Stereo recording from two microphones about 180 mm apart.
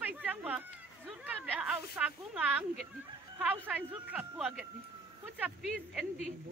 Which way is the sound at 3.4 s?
10° right (ahead or behind).